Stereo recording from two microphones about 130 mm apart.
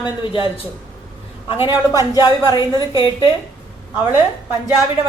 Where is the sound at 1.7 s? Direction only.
25° right (ahead or behind).